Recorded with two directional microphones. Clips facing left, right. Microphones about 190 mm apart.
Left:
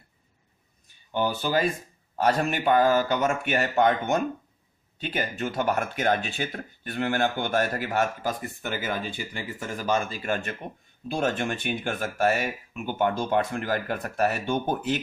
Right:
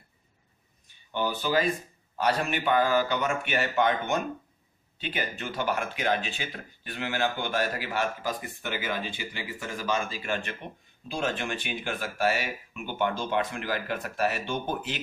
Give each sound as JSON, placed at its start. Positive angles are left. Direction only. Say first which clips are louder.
{"t": 1.1, "sound": "speech", "louder": "left 2 dB", "side_deg": 45}